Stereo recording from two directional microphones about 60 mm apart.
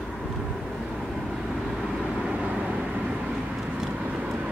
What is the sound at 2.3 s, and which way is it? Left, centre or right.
Vehicle, centre.